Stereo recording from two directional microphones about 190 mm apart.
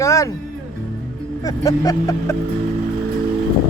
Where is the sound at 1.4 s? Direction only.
20° left (ahead or behind).